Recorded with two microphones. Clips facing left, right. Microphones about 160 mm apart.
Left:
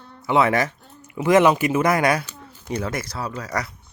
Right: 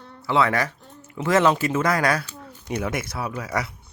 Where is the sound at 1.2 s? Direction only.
15° left (ahead or behind).